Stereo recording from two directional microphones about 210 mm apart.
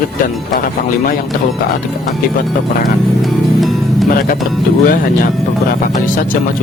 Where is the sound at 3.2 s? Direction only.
Centre (ahead or behind).